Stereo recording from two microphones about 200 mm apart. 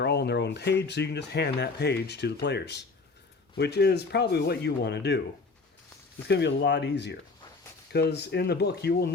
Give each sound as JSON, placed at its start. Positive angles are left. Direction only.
{"t": 0.0, "sound": "speech", "side_deg": 55}
{"t": 6.2, "sound": "speech", "side_deg": 55}